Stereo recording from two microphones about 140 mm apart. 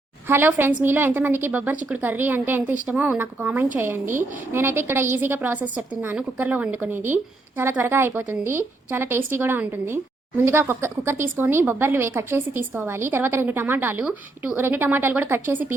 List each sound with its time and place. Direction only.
0.3 s speech: 15° right (ahead or behind)